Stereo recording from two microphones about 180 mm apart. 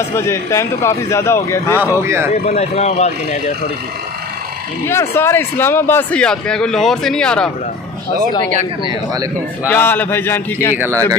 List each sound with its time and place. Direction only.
0.1 s speech: 15° left (ahead or behind)
1.8 s speech: 15° right (ahead or behind)
2.3 s speech: 40° left (ahead or behind)
4.8 s a man's voice: 15° left (ahead or behind)
8.8 s speech: 20° right (ahead or behind)
9.7 s speech: 10° left (ahead or behind)
10.8 s speech: 15° right (ahead or behind)